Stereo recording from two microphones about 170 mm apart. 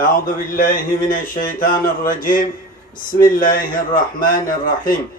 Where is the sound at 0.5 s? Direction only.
50° left (ahead or behind).